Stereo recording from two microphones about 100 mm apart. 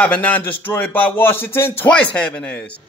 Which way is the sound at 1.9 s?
10° left (ahead or behind).